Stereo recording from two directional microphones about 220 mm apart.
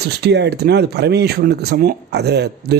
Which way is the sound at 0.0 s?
50° right (ahead or behind).